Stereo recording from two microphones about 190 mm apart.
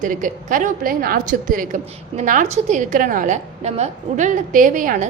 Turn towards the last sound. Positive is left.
turn(degrees=-45)  # may be behind; listen again after turning